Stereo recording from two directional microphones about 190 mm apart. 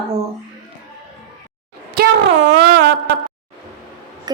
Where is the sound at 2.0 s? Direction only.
55° right (ahead or behind).